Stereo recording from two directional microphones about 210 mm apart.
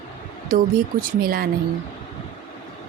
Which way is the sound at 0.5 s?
40° right (ahead or behind).